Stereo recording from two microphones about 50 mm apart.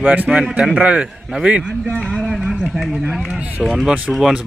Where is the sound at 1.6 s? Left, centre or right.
Centre.